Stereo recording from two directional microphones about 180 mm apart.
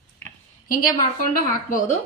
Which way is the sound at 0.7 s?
50° left (ahead or behind).